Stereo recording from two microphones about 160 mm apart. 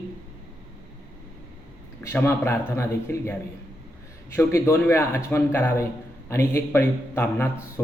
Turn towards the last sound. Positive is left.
turn(degrees=15)  # may be behind; listen again after turning